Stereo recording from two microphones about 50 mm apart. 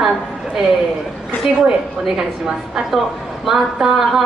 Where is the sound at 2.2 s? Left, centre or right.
Centre.